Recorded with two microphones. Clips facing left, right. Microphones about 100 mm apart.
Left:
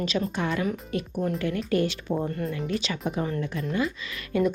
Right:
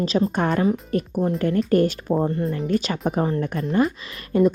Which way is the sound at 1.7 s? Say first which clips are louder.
Right 5 dB; 45° right (ahead or behind).